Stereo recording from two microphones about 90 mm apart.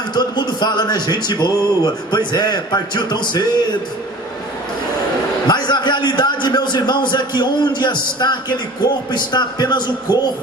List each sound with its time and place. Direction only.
0.1 s a man's voice: 55° left (ahead or behind)
5.5 s a man's voice: 55° left (ahead or behind)